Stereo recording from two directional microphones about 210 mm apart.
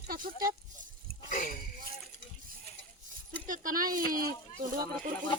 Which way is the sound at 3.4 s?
40° right (ahead or behind).